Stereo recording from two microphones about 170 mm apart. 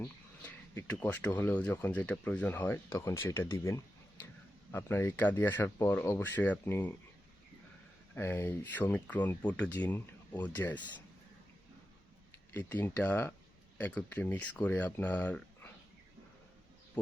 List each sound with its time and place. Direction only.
0.0 s speech: 10° left (ahead or behind)
8.1 s speech: 15° left (ahead or behind)
12.5 s speech: 10° left (ahead or behind)